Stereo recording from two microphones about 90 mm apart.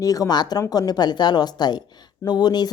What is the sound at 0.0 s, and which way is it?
Speech, 40° left (ahead or behind).